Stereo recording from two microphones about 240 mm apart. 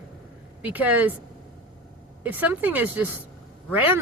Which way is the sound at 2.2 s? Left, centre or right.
Centre.